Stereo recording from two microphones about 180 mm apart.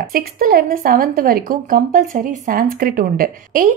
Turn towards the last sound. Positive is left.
turn(degrees=-55)  # may be behind; listen again after turning